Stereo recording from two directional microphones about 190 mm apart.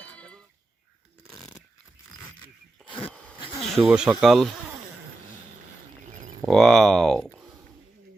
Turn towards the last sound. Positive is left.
turn(degrees=5)  # may be behind; listen again after turning